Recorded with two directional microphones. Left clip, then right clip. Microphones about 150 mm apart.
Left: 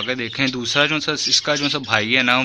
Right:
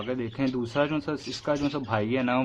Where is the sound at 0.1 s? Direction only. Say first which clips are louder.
Left 5 dB; 15° left (ahead or behind).